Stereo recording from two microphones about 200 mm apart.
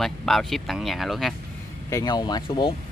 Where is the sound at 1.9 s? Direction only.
20° left (ahead or behind).